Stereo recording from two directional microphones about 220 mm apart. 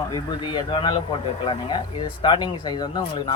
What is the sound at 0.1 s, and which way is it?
Speech, 20° left (ahead or behind).